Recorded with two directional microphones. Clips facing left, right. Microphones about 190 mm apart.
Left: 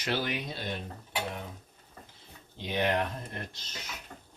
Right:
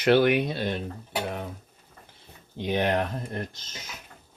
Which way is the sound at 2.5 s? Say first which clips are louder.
Right 4 dB; 50° right (ahead or behind).